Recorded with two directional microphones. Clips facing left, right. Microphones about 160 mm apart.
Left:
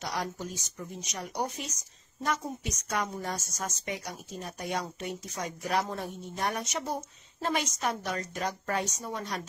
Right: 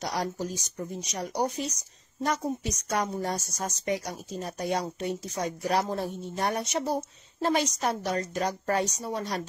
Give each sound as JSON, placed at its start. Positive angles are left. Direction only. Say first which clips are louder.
{"t": 0.0, "sound": "a woman's voice", "louder": "right 4 dB", "side_deg": -35}